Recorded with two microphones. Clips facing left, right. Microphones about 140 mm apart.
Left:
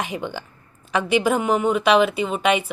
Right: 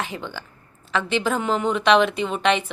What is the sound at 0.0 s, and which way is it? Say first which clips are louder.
A woman's voice: left 3 dB; 15° left (ahead or behind).